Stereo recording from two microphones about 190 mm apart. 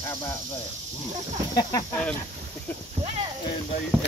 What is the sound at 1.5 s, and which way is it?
Speech, 20° left (ahead or behind).